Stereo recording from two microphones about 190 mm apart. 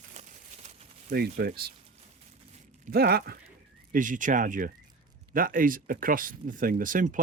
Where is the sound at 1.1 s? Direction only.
55° right (ahead or behind).